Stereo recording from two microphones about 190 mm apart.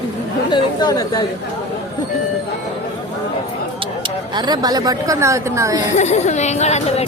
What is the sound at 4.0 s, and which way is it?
Speech, 20° right (ahead or behind).